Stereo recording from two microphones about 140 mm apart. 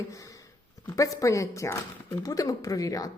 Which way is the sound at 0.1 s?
25° left (ahead or behind).